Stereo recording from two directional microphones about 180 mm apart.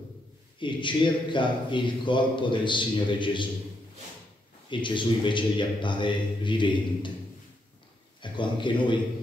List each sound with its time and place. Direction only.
0.6 s a man's voice: 25° left (ahead or behind)
4.6 s a man's voice: 25° left (ahead or behind)
8.2 s a man's voice: 25° left (ahead or behind)